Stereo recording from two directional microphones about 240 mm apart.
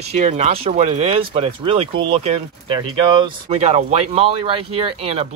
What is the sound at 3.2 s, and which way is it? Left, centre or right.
Speech, right.